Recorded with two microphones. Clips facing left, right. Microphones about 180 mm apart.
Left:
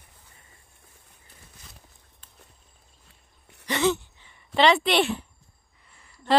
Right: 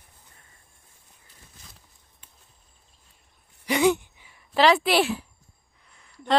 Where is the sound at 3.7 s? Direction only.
10° right (ahead or behind).